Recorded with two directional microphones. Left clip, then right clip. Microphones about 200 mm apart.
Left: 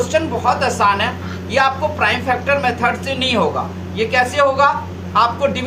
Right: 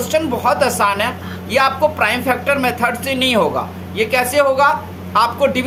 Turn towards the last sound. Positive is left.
turn(degrees=-55)  # may be behind; listen again after turning